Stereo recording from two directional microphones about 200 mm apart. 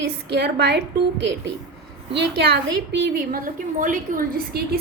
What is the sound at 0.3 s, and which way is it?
Speech, 55° right (ahead or behind).